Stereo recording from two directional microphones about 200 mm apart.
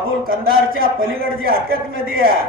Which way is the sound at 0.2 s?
45° right (ahead or behind).